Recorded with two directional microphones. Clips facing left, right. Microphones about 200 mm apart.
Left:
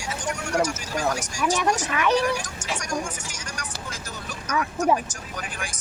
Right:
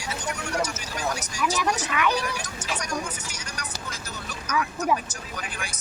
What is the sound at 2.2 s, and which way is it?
Speech, 45° left (ahead or behind).